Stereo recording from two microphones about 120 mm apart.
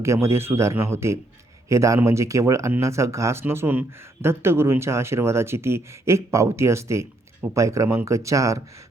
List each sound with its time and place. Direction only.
0.0 s speech: 25° right (ahead or behind)